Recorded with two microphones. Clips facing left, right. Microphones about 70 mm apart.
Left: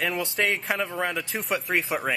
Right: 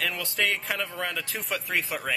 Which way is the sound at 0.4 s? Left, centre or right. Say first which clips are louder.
Left 1 dB; centre.